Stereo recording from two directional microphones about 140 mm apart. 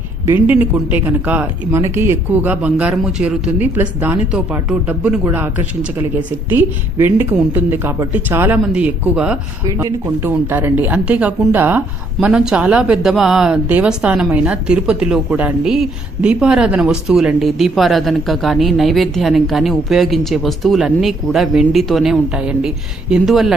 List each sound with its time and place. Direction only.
0.3 s speech: 15° right (ahead or behind)
9.6 s speech: 20° right (ahead or behind); by 23.6 s centre (ahead or behind)